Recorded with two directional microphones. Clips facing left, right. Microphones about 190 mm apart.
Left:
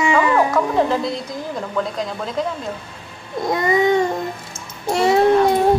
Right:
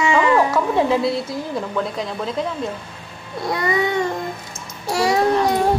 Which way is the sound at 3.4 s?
20° left (ahead or behind).